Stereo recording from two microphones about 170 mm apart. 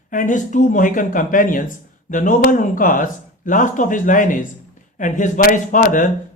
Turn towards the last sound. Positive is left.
turn(degrees=50)  # may be behind; listen again after turning